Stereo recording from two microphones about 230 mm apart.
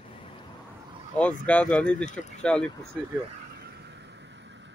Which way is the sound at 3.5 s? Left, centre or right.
Right.